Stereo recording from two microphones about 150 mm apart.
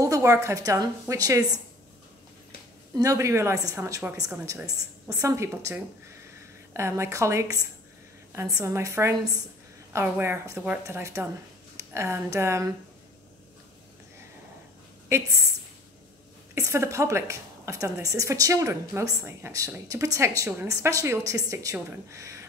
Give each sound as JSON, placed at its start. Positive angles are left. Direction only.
{"t": 0.0, "sound": "a woman's voice", "side_deg": -20}
{"t": 2.9, "sound": "a woman's voice", "side_deg": -20}
{"t": 15.1, "sound": "a woman's voice", "side_deg": -20}
{"t": 16.5, "sound": "a woman's voice", "side_deg": -20}